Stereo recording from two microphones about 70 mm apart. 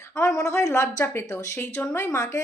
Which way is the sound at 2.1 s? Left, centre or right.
Left.